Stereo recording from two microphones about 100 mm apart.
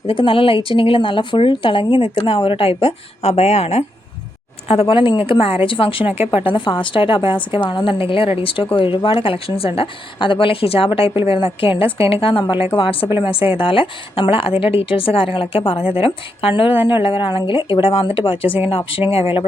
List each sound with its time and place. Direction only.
0.1 s a woman's voice: 65° left (ahead or behind); by 3.8 s 90° left
4.7 s a woman's voice: 60° left (ahead or behind)
12.4 s a woman's voice: 50° left (ahead or behind)
12.7 s a woman's voice: 65° left (ahead or behind)
18.9 s a woman's voice: 70° left (ahead or behind)